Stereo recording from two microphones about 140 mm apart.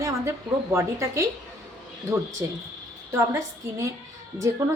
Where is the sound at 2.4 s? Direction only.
20° right (ahead or behind).